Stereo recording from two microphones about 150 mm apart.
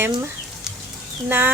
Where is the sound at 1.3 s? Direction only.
15° right (ahead or behind).